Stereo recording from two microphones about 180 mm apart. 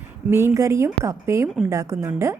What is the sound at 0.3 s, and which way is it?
A woman's voice, 15° right (ahead or behind).